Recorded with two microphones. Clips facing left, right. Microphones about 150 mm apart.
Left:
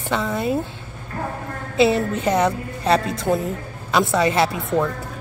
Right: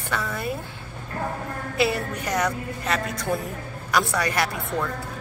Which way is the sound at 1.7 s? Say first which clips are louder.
Left 7 dB; 25° left (ahead or behind).